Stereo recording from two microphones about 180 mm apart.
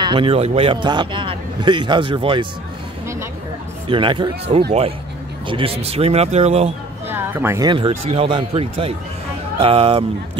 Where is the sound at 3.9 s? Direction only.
25° right (ahead or behind).